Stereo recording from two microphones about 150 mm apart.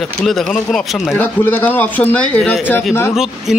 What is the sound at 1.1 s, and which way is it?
A man's voice, 10° left (ahead or behind).